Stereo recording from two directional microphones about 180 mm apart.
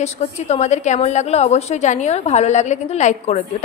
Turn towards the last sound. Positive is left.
turn(degrees=40)  # may be behind; listen again after turning